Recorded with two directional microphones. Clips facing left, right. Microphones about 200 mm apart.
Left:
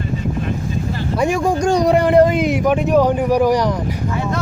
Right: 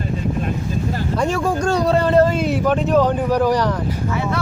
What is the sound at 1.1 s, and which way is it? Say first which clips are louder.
A man's voice: left 3 dB; 10° left (ahead or behind).